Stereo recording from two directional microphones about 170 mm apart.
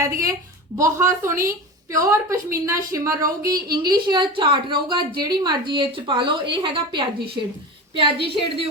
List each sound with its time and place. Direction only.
0.0 s a woman's voice: 20° right (ahead or behind)